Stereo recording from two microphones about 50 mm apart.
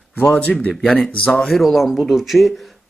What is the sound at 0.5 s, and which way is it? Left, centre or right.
Speech, left.